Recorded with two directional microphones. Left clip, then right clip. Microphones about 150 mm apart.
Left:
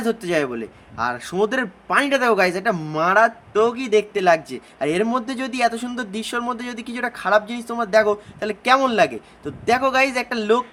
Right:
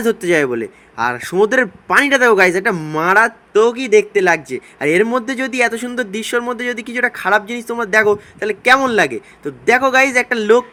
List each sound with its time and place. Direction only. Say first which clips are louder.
0.0 s a man's voice: right 7 dB; 20° right (ahead or behind)